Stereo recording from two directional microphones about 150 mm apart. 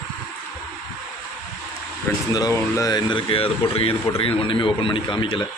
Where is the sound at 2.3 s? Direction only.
25° left (ahead or behind).